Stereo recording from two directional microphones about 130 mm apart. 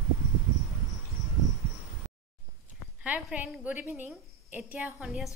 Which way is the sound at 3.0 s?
10° right (ahead or behind).